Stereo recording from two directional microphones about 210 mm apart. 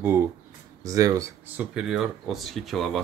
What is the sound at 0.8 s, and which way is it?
Speech, 15° right (ahead or behind).